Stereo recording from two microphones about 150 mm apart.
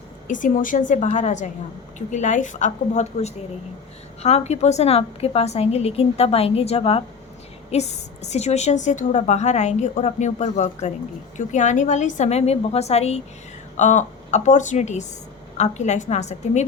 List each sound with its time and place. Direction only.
0.3 s a woman's voice: 60° left (ahead or behind)